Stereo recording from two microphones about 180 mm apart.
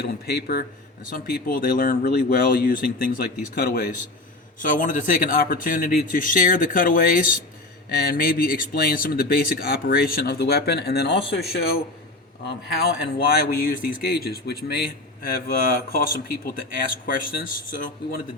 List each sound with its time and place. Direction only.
0.0 s speech: 60° left (ahead or behind)
4.6 s speech: 45° left (ahead or behind)